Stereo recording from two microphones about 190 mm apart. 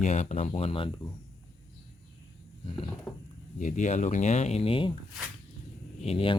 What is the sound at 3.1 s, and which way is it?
Speech, 5° left (ahead or behind).